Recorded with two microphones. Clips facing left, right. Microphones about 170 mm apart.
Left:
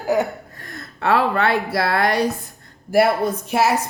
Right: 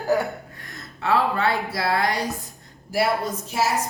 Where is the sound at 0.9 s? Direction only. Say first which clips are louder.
Left 3 dB; 65° left (ahead or behind).